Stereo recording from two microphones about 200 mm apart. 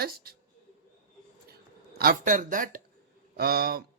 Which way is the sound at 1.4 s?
50° right (ahead or behind).